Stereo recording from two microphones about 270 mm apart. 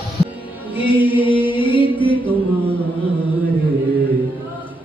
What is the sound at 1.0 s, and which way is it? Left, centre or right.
Chant, centre.